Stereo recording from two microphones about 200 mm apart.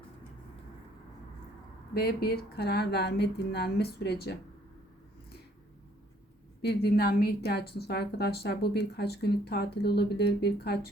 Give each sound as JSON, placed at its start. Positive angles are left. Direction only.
{"t": 1.9, "sound": "a woman's voice", "side_deg": 50}
{"t": 6.6, "sound": "a woman's voice", "side_deg": 55}